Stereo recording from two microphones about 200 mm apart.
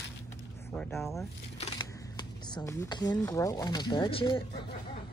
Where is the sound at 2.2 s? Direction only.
20° left (ahead or behind).